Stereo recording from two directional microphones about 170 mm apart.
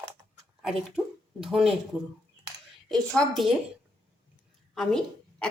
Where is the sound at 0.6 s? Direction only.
Centre (ahead or behind).